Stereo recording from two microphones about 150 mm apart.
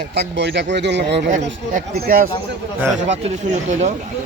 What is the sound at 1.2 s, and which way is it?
Speech, 65° right (ahead or behind).